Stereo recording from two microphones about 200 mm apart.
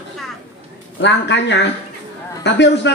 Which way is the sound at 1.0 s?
60° left (ahead or behind).